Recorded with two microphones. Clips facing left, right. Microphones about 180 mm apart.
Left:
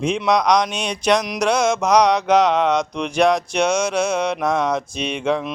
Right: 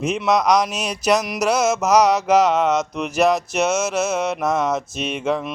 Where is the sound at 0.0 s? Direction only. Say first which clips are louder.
Left 1 dB; 5° right (ahead or behind).